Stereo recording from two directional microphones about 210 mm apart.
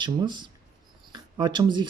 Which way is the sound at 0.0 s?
20° right (ahead or behind).